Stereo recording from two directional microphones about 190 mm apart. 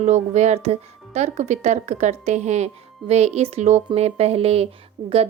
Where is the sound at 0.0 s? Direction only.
35° right (ahead or behind).